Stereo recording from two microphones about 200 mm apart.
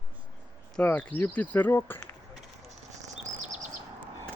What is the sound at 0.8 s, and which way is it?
Speech, 5° left (ahead or behind).